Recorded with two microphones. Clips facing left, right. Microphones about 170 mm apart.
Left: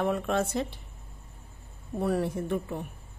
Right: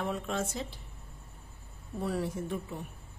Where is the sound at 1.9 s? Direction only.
55° left (ahead or behind).